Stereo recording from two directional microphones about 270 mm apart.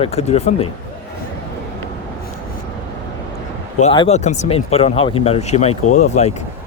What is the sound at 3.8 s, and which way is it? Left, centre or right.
Speech, left.